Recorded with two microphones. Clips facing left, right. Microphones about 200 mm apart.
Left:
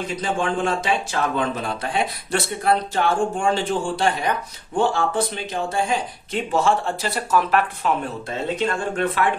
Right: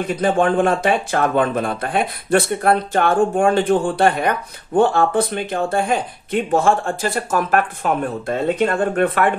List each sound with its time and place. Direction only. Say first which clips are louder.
0.0 s speech: right 7 dB; 55° right (ahead or behind)